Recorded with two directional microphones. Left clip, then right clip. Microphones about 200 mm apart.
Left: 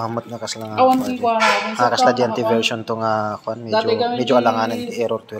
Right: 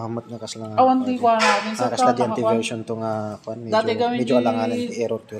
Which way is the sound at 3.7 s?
55° right (ahead or behind).